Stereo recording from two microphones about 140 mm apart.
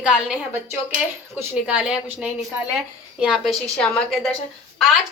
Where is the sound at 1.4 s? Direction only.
10° right (ahead or behind).